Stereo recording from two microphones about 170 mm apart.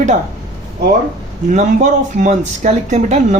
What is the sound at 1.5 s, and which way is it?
Speech, 45° right (ahead or behind).